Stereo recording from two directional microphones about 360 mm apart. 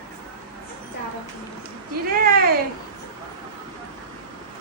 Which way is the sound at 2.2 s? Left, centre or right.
Right.